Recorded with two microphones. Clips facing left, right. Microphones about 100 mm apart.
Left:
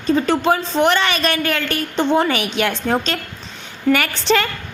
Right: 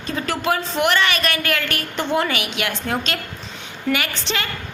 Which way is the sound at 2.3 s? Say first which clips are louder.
Left 5 dB; 35° left (ahead or behind).